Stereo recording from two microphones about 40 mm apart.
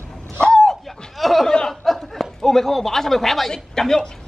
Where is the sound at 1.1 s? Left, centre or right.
Centre.